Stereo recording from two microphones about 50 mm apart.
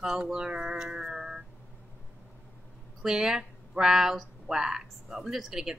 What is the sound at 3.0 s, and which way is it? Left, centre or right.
Speech, centre.